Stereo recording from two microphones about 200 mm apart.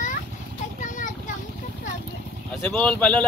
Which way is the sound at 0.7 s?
40° left (ahead or behind).